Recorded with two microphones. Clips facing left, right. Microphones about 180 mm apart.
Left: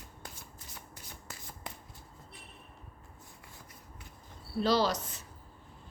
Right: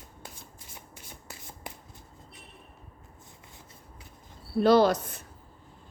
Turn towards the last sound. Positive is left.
turn(degrees=-55)  # may be behind; listen again after turning